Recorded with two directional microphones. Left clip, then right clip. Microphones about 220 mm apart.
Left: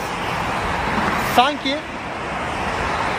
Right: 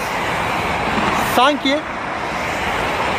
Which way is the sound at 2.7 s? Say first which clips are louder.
Right 2 dB; 50° right (ahead or behind).